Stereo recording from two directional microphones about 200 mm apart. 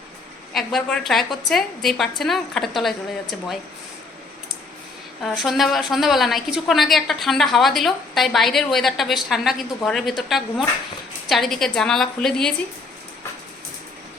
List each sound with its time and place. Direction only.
0.5 s a woman's voice: centre (ahead or behind)
5.2 s a woman's voice: centre (ahead or behind)